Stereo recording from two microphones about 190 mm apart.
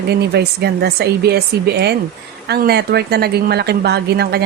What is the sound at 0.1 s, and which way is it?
Speech, 55° right (ahead or behind).